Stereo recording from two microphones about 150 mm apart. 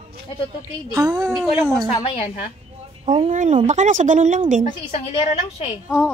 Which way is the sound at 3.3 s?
55° right (ahead or behind).